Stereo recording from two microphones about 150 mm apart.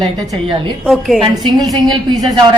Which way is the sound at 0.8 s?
Centre (ahead or behind).